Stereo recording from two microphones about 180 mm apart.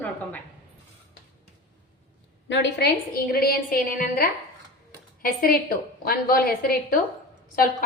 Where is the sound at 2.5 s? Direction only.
70° left (ahead or behind).